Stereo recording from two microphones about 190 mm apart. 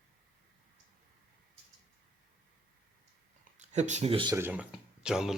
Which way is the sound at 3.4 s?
40° right (ahead or behind).